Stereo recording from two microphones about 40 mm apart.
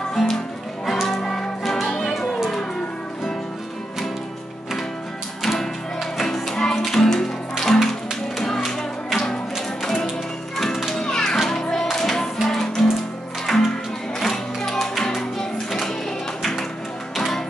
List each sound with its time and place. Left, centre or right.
0.2 s music: centre
1.2 s music: centre
5.4 s music: centre
10.6 s children playing: centre
11.0 s music: centre
13.5 s music: centre
14.2 s music: centre